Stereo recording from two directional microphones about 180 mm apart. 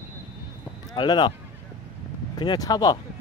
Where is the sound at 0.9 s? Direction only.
25° left (ahead or behind).